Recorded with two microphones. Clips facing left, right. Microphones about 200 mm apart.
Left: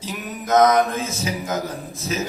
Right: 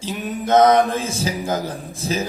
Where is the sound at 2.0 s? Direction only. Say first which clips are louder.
Right 3 dB; 30° right (ahead or behind).